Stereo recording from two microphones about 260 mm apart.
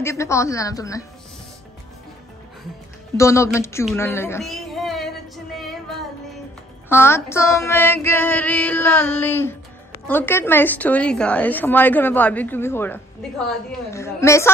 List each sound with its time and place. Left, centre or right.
0.0 s a woman's voice: centre
3.2 s a woman's voice: centre
3.9 s female singing: centre
6.9 s a woman's voice: centre